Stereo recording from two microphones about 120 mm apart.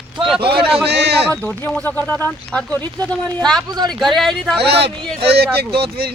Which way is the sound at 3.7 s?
35° right (ahead or behind).